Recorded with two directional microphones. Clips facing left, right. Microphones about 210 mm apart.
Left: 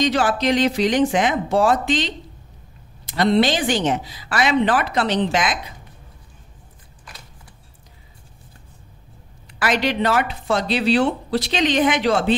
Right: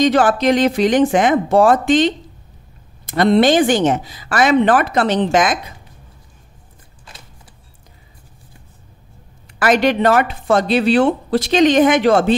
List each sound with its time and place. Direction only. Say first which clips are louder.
0.0 s speech: right 5 dB; 50° right (ahead or behind)
7.1 s a sound: right 1 dB; 25° right (ahead or behind)
9.5 s speech: right 6 dB; 50° right (ahead or behind)